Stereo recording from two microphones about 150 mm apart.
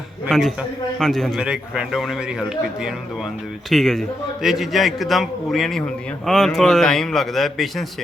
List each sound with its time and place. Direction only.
0.3 s a man's voice: centre (ahead or behind)
3.7 s a man's voice: centre (ahead or behind)